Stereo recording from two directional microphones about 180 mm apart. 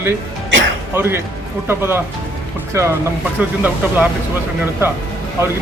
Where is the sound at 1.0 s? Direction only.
15° right (ahead or behind).